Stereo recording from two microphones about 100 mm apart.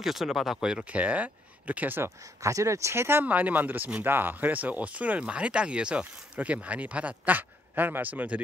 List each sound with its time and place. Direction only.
0.0 s speech: 5° right (ahead or behind)